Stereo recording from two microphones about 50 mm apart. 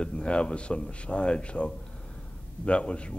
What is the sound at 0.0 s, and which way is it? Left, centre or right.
A man's voice, centre.